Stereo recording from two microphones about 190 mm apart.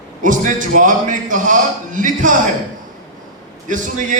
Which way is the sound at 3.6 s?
45° right (ahead or behind).